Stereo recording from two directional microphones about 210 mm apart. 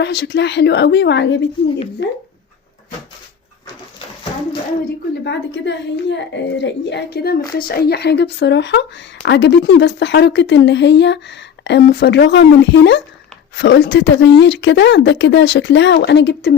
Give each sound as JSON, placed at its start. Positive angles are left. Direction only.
{"t": 0.0, "sound": "speech", "side_deg": 55}
{"t": 5.2, "sound": "speech", "side_deg": 60}